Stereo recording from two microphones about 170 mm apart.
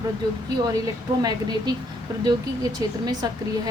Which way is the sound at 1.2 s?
25° right (ahead or behind).